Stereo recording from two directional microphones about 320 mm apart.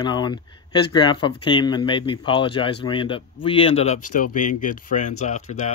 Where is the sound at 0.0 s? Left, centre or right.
Centre.